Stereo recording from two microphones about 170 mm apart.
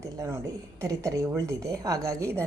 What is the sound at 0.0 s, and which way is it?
Speech, 15° right (ahead or behind).